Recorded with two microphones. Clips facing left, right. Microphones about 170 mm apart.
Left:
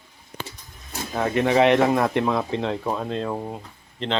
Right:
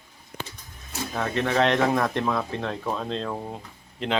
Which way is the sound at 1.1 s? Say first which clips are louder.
Left 5 dB; 10° left (ahead or behind).